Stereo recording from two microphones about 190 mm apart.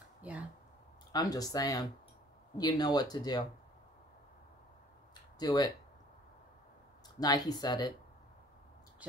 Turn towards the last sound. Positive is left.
turn(degrees=20)  # may be behind; listen again after turning